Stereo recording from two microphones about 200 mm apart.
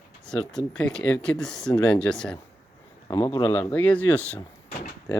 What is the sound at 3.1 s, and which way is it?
Speech, 15° left (ahead or behind).